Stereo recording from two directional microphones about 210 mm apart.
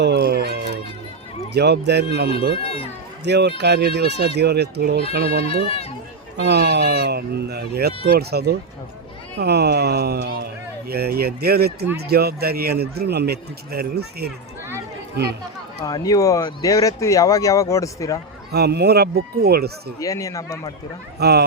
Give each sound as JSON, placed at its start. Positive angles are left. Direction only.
{"t": 0.0, "sound": "a sound", "side_deg": -50}
{"t": 1.5, "sound": "speech", "side_deg": -55}
{"t": 2.6, "sound": "speech", "side_deg": 25}
{"t": 3.2, "sound": "speech", "side_deg": -55}
{"t": 5.5, "sound": "speech", "side_deg": 25}
{"t": 6.3, "sound": "speech", "side_deg": -55}
{"t": 15.8, "sound": "speech", "side_deg": 15}
{"t": 18.5, "sound": "speech", "side_deg": -50}
{"t": 20.0, "sound": "speech", "side_deg": 15}
{"t": 21.2, "sound": "speech", "side_deg": -50}